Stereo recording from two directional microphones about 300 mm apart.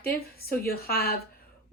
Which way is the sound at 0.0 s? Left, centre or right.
Left.